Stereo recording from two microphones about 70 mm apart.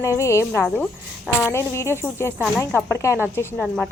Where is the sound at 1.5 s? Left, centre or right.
Left.